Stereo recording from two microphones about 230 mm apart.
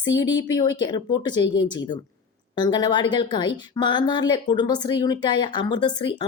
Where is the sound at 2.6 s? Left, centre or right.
Centre.